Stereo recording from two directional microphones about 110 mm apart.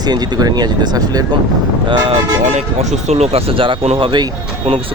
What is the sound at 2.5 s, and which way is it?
Speech, 90° right.